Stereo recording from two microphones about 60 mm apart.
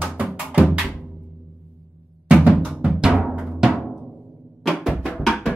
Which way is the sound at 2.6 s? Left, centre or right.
Right.